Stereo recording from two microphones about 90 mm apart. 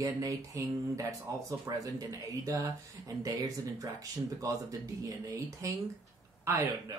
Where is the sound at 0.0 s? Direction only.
40° right (ahead or behind).